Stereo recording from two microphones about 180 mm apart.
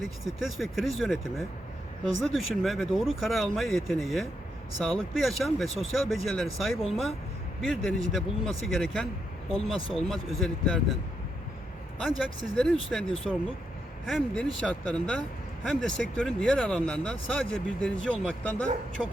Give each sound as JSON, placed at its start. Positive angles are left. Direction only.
{"t": 0.0, "sound": "speech", "side_deg": 0}
{"t": 9.7, "sound": "speech", "side_deg": 30}
{"t": 10.1, "sound": "speech", "side_deg": 0}
{"t": 11.9, "sound": "speech", "side_deg": 5}